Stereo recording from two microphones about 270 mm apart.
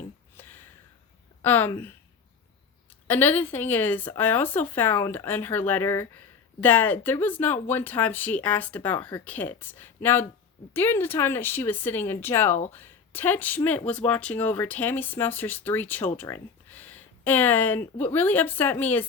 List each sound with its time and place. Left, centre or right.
0.3 s a sound: centre
1.4 s speech: centre
3.1 s speech: centre